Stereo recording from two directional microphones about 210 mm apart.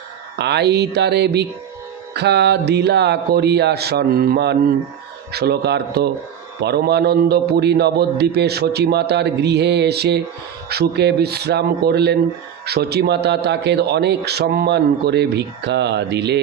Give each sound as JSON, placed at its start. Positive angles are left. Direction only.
{"t": 0.3, "sound": "a man's voice", "side_deg": -55}